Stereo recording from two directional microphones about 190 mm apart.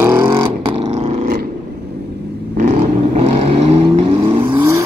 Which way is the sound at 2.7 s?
35° right (ahead or behind).